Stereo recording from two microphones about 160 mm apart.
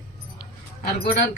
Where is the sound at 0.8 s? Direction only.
75° left (ahead or behind).